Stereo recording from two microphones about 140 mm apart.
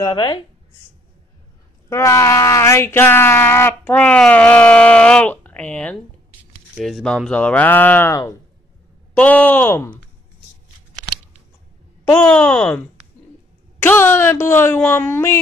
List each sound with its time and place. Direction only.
0.0 s speech: 30° left (ahead or behind)
1.9 s speech: 20° left (ahead or behind)
12.0 s speech: 15° left (ahead or behind)